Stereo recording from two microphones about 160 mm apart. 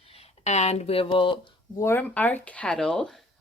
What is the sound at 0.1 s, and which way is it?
Speech, 40° left (ahead or behind).